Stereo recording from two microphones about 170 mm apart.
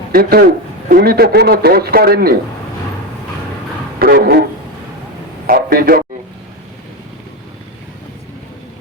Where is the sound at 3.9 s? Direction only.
60° right (ahead or behind).